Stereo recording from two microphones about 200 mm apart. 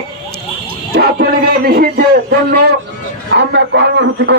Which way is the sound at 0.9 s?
55° right (ahead or behind).